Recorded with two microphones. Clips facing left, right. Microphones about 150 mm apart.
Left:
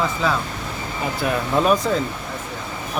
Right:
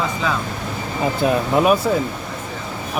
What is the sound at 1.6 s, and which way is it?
Speech, 10° right (ahead or behind).